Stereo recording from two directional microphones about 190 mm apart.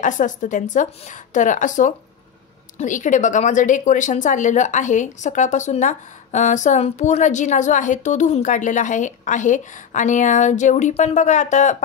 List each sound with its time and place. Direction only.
0.0 s a woman's voice: 40° left (ahead or behind)